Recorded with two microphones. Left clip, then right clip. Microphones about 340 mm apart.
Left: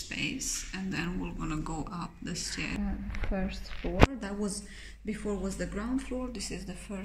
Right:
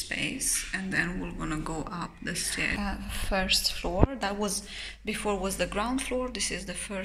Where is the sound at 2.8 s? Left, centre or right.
Right.